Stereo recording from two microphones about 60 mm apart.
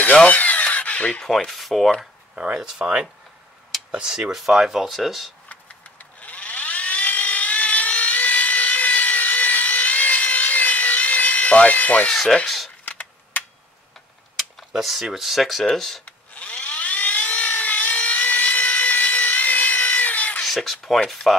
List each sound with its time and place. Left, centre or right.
0.0 s rub: left
1.2 s rub: centre
2.5 s speech: centre
6.2 s helicopter: left
12.4 s speech: centre
12.8 s a sound: left
14.7 s speech: centre
16.1 s a sound: left
20.4 s a sound: centre
21.3 s speech: centre